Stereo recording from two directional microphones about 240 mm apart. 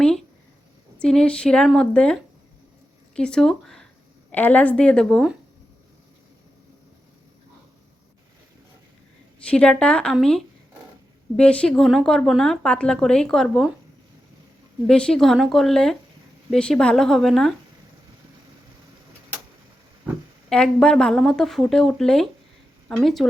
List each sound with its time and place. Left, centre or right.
0.0 s a sound: centre
0.9 s a woman's voice: centre
9.4 s a woman's voice: centre
14.8 s a woman's voice: centre
20.5 s a woman's voice: centre